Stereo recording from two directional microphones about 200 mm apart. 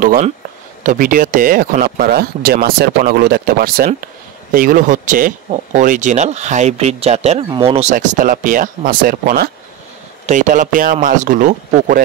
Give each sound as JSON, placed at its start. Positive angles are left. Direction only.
{"t": 0.0, "sound": "speech", "side_deg": -45}
{"t": 7.9, "sound": "speech", "side_deg": -40}